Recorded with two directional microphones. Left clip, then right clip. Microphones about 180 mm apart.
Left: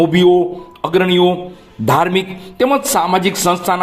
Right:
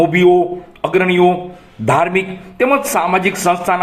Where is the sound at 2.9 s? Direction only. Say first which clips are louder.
Even; 30° left (ahead or behind).